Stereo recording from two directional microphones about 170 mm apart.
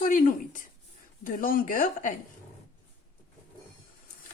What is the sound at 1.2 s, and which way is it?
Speech, 50° left (ahead or behind).